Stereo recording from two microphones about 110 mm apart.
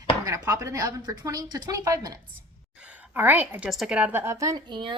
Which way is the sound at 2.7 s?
10° right (ahead or behind).